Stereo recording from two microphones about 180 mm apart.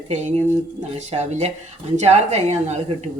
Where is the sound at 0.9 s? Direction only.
40° right (ahead or behind).